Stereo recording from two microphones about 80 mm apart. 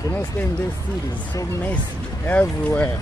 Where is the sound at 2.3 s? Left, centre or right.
Centre.